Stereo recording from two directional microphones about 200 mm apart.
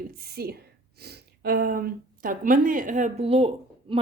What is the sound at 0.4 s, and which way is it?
Speech, 50° right (ahead or behind).